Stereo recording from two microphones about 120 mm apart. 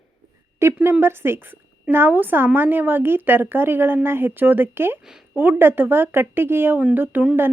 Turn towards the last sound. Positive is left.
turn(degrees=-10)  # may be behind; listen again after turning